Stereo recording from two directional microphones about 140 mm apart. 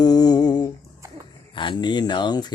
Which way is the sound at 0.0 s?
30° left (ahead or behind).